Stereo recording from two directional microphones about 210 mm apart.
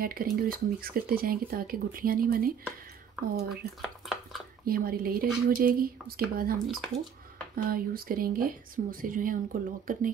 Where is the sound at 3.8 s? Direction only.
Centre (ahead or behind).